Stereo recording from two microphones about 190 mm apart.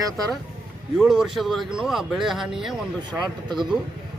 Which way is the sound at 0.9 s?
5° right (ahead or behind).